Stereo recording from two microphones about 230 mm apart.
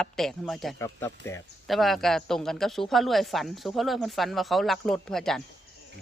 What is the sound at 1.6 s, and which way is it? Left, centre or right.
Speech, centre.